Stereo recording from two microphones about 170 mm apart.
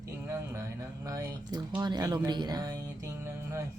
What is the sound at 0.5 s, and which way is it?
A woman's voice, 20° right (ahead or behind).